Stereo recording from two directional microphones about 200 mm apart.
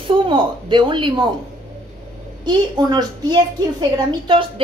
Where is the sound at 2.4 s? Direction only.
20° right (ahead or behind).